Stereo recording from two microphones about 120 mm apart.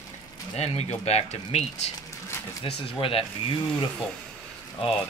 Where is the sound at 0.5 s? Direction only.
65° left (ahead or behind).